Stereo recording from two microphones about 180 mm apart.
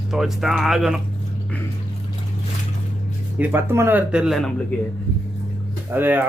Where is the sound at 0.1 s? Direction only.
Centre (ahead or behind).